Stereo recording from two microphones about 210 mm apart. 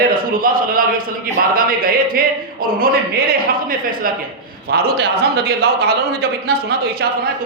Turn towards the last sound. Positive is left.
turn(degrees=-45)  # may be behind; listen again after turning